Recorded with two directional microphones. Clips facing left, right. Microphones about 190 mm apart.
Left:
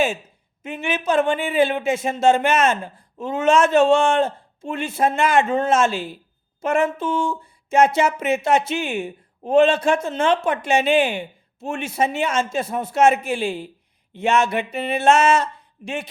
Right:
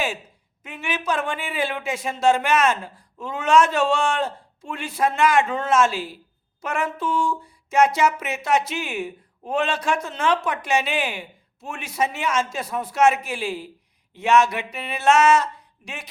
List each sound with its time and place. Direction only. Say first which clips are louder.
0.6 s speech: left 4 dB; 25° left (ahead or behind)